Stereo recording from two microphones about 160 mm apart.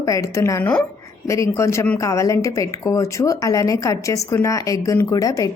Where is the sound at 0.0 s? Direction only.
20° left (ahead or behind).